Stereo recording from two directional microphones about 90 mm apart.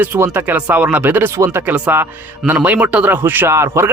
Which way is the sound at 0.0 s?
25° right (ahead or behind).